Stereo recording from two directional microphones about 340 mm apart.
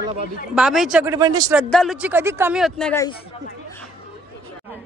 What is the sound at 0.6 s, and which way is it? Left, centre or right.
Speech, centre.